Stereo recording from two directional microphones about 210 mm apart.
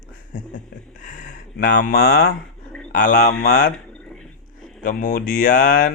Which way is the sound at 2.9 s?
40° left (ahead or behind).